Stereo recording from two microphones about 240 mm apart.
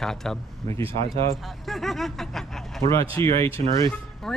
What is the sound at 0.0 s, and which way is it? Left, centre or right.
Speech, centre.